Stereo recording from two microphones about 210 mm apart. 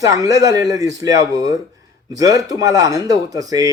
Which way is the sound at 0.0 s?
15° right (ahead or behind).